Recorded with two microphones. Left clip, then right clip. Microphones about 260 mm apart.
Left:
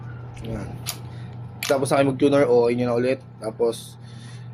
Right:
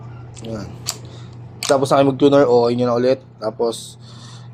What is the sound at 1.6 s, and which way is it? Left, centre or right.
Speech, centre.